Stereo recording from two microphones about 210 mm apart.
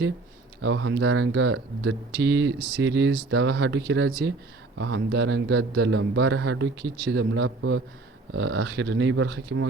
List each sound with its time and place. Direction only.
0.6 s a man's voice: 65° right (ahead or behind)